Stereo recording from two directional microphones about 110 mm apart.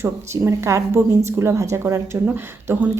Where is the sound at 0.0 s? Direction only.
25° right (ahead or behind).